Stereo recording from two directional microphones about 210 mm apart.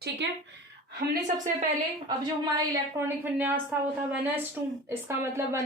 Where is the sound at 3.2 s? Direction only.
10° right (ahead or behind).